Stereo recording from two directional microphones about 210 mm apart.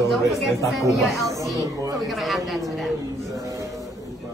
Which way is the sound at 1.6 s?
15° right (ahead or behind).